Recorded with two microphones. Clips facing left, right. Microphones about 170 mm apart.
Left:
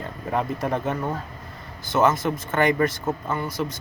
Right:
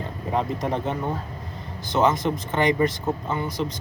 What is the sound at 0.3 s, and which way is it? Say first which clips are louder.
Speech: even; 20° right (ahead or behind).